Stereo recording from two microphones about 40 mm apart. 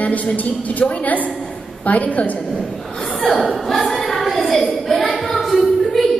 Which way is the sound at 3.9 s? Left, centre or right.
Centre.